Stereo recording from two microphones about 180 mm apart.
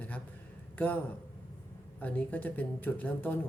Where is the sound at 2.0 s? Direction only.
10° left (ahead or behind).